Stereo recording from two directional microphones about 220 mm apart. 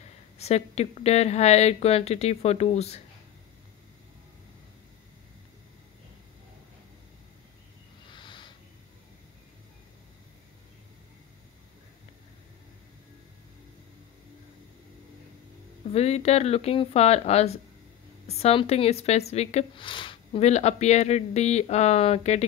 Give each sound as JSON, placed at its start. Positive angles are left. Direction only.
{"t": 0.4, "sound": "speech", "side_deg": 30}
{"t": 8.1, "sound": "a sound", "side_deg": 20}
{"t": 15.9, "sound": "speech", "side_deg": 30}